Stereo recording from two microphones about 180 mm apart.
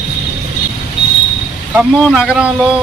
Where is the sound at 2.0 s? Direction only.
Centre (ahead or behind).